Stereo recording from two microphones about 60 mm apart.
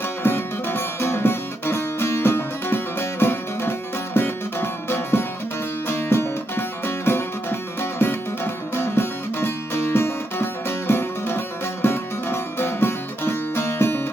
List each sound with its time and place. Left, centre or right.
0.2 s music: left